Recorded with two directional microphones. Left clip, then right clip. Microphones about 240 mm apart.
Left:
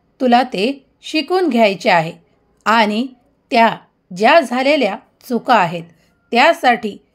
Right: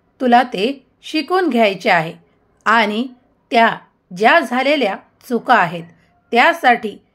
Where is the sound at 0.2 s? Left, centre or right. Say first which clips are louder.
Even; left.